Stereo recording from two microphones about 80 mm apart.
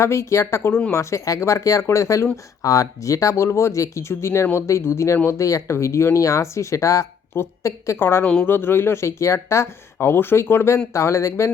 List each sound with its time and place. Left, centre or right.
0.0 s speech: left